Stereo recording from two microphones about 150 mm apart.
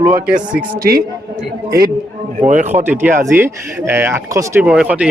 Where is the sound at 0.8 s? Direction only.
80° right.